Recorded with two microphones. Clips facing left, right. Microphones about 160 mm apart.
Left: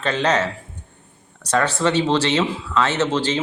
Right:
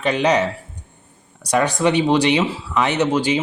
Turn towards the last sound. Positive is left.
turn(degrees=-10)  # may be behind; listen again after turning